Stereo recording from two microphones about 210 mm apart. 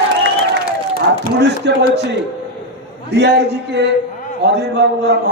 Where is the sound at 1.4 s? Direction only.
55° right (ahead or behind).